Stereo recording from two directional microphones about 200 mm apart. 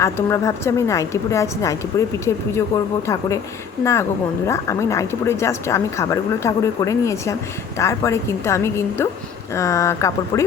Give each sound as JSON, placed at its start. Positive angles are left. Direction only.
{"t": 0.0, "sound": "speech", "side_deg": 15}
{"t": 4.4, "sound": "speech", "side_deg": 15}